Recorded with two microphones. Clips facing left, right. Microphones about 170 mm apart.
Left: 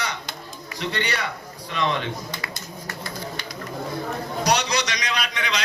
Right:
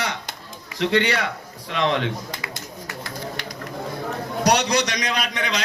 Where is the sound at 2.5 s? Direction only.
90° right.